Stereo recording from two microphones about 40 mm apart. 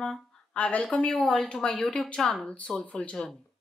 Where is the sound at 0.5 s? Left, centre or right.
Left.